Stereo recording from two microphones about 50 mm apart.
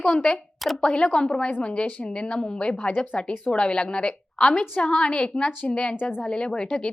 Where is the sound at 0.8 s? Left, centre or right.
Centre.